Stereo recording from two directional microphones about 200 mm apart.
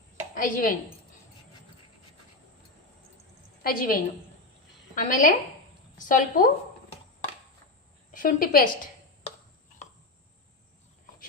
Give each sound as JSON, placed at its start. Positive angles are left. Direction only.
{"t": 0.3, "sound": "a woman's voice", "side_deg": 45}
{"t": 3.6, "sound": "a woman's voice", "side_deg": 45}
{"t": 8.1, "sound": "a woman's voice", "side_deg": 45}